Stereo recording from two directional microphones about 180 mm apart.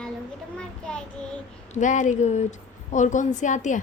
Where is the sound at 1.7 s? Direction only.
45° left (ahead or behind).